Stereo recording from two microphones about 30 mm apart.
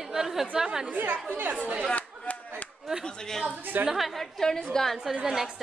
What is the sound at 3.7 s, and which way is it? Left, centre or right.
Speech, right.